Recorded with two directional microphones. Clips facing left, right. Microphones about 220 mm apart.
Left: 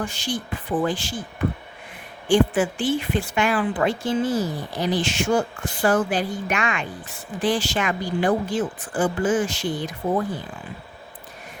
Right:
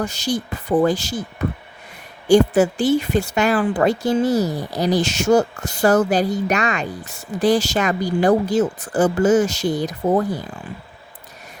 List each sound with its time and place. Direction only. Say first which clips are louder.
0.0 s speech: right 5 dB; 40° right (ahead or behind)